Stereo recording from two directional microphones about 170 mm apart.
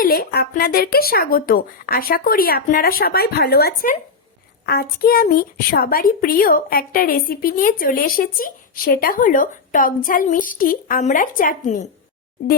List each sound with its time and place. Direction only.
0.0 s a woman's voice: 60° left (ahead or behind)